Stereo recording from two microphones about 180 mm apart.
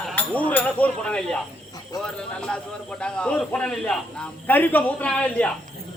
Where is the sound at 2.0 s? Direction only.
5° left (ahead or behind).